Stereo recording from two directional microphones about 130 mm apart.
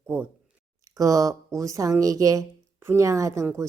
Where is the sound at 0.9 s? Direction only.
25° right (ahead or behind).